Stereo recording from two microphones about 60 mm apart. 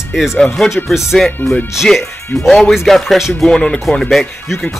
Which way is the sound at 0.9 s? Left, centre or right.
Centre.